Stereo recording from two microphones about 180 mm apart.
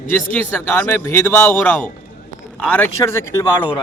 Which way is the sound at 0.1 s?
10° left (ahead or behind).